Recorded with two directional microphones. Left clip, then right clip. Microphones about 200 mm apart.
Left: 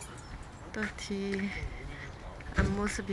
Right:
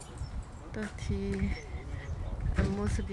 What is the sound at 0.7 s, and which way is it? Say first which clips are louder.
Speech: left 3 dB; 10° right (ahead or behind).